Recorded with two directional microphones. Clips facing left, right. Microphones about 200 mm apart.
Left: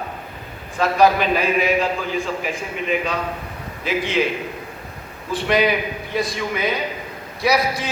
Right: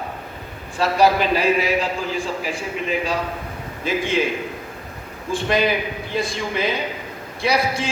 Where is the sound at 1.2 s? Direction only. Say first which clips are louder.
Even; 35° right (ahead or behind).